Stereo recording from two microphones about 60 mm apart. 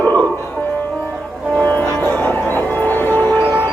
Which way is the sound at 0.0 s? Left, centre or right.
Left.